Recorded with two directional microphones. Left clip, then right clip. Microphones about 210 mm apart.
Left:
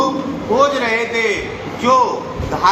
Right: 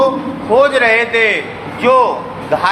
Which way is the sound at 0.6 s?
25° right (ahead or behind).